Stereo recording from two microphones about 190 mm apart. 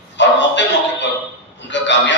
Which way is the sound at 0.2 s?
70° left (ahead or behind).